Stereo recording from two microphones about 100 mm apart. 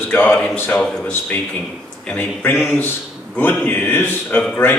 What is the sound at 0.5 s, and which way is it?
Speech, 20° left (ahead or behind).